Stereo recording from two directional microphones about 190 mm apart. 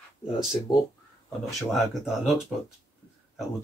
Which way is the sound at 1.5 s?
Centre (ahead or behind).